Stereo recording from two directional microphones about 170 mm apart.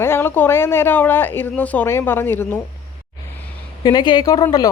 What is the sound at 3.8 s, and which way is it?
Speech, 25° left (ahead or behind).